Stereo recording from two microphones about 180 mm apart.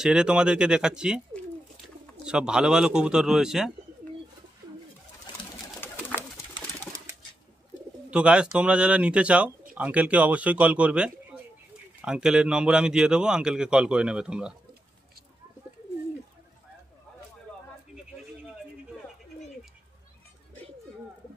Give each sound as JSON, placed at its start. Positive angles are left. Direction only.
{"t": 0.0, "sound": "speech", "side_deg": -5}
{"t": 2.2, "sound": "speech", "side_deg": -5}
{"t": 5.8, "sound": "bird", "side_deg": 10}
{"t": 6.5, "sound": "pigeon", "side_deg": -20}
{"t": 8.1, "sound": "speech", "side_deg": -5}